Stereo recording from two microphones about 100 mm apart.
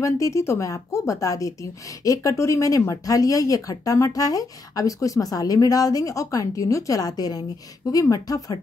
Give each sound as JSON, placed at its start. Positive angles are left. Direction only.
{"t": 0.0, "sound": "speech", "side_deg": 30}